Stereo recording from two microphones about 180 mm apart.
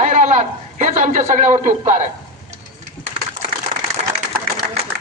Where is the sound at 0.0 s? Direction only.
45° right (ahead or behind).